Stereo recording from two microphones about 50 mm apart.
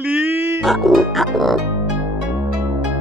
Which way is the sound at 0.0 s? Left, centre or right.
Right.